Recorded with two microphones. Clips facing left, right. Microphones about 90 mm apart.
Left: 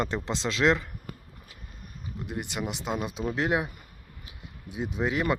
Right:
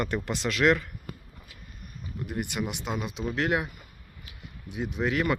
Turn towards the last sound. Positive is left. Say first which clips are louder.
# even
turn(degrees=25)  # may be behind; listen again after turning